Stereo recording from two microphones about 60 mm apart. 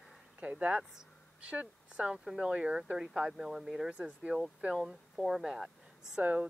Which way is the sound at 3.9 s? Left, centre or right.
Centre.